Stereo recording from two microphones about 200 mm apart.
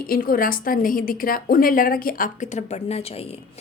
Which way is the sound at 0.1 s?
45° left (ahead or behind).